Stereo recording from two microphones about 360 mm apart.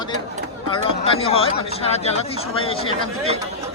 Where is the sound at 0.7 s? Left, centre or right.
Centre.